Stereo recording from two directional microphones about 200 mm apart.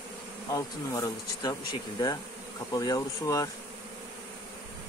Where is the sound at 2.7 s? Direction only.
15° left (ahead or behind).